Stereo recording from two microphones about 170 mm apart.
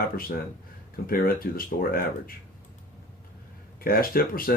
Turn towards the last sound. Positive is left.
turn(degrees=60)  # may be behind; listen again after turning